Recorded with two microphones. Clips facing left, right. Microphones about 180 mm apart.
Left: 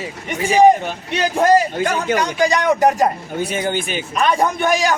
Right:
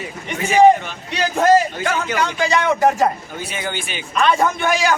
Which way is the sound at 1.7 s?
40° left (ahead or behind).